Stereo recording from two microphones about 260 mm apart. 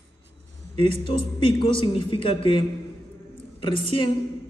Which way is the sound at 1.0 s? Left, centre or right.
Centre.